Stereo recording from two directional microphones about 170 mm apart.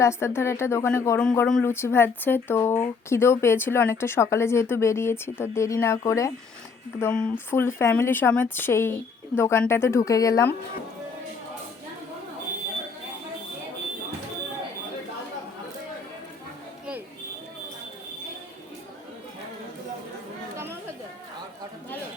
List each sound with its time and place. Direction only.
0.0 s speech: 15° left (ahead or behind)
7.0 s speech: 5° left (ahead or behind)